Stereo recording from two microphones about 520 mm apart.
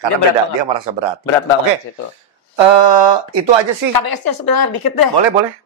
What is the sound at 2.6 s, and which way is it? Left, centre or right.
Speech, right.